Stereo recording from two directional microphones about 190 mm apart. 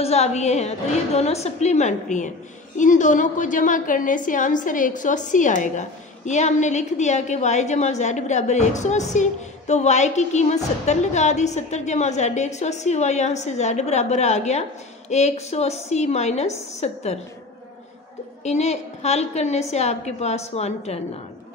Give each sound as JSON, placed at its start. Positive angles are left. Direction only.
{"t": 0.0, "sound": "a woman's voice", "side_deg": 35}
{"t": 18.4, "sound": "a woman's voice", "side_deg": 35}